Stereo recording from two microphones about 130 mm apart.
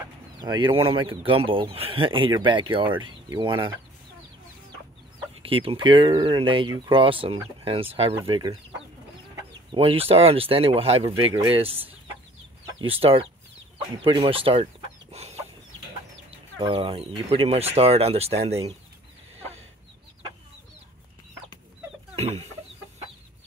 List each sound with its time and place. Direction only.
0.0 s a sound: 35° right (ahead or behind)
0.8 s speech: 45° right (ahead or behind)
5.3 s speech: 45° right (ahead or behind)
8.3 s speech: 35° right (ahead or behind)
9.7 s speech: 45° right (ahead or behind)
12.8 s speech: 45° right (ahead or behind)
13.7 s chicken: 45° right (ahead or behind)
16.3 s speech: 40° right (ahead or behind)
22.1 s chicken: 55° right (ahead or behind)